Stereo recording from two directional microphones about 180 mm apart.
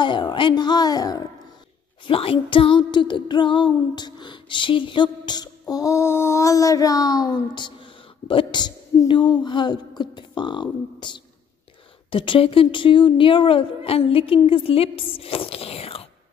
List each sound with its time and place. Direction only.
0.0 s female singing: 25° left (ahead or behind)
2.0 s speech: 30° left (ahead or behind)
2.5 s female singing: 30° left (ahead or behind)
12.1 s speech: 30° left (ahead or behind)